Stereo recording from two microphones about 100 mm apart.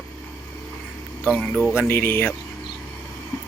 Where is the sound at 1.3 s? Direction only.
15° left (ahead or behind).